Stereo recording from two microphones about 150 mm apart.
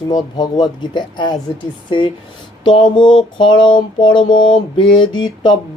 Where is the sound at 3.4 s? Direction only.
30° left (ahead or behind).